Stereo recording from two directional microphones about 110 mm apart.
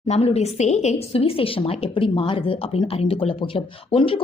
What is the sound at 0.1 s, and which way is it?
A woman's voice, 75° left (ahead or behind).